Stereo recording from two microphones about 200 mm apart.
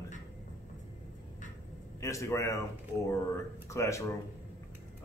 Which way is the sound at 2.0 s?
15° left (ahead or behind).